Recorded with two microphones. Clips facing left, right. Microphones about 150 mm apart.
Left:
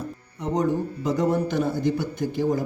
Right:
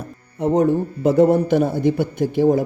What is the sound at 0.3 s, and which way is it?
Speech, 60° right (ahead or behind).